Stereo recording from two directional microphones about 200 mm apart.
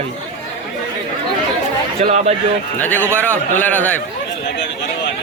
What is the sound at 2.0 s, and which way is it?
Speech, 35° right (ahead or behind).